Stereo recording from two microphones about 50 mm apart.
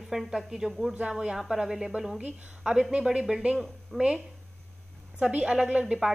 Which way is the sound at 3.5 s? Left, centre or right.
Centre.